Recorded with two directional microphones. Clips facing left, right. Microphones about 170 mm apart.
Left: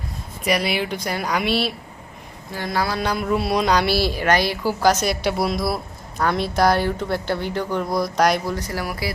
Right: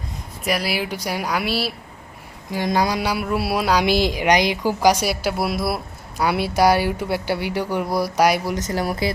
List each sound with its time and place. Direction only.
0.4 s speech: centre (ahead or behind)
2.5 s speech: 15° right (ahead or behind)
8.5 s speech: 20° right (ahead or behind)